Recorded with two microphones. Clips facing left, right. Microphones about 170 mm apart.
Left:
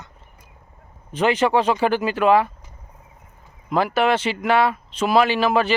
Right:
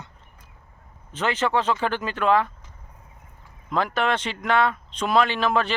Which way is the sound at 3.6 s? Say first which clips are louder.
Left 5 dB; 5° left (ahead or behind).